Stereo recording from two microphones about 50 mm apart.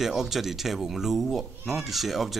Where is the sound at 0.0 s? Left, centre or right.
Centre.